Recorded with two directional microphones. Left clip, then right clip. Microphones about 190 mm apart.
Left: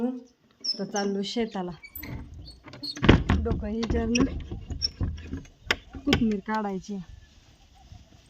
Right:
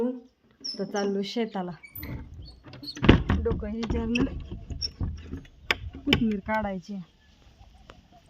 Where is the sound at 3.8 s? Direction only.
Centre (ahead or behind).